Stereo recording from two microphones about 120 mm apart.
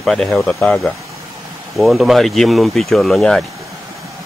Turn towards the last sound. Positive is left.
turn(degrees=5)  # may be behind; listen again after turning